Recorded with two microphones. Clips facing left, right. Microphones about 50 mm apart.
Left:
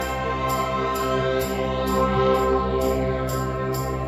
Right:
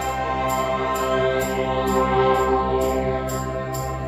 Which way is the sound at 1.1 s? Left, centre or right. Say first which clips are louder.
Right 2 dB; centre.